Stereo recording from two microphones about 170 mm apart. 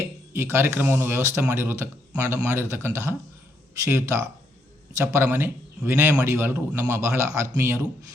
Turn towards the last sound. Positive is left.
turn(degrees=-15)  # may be behind; listen again after turning